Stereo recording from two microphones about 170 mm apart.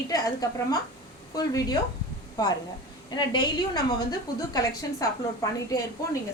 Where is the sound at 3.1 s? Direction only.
25° left (ahead or behind).